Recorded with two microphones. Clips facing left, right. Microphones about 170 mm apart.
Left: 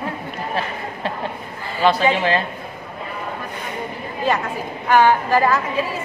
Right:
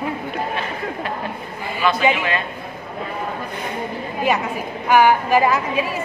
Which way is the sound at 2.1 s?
35° left (ahead or behind).